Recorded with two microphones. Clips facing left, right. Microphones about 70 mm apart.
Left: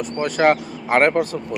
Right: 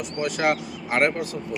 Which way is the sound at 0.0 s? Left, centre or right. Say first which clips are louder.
Left 6 dB; left.